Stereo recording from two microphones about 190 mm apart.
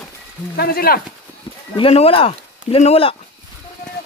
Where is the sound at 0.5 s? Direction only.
55° left (ahead or behind).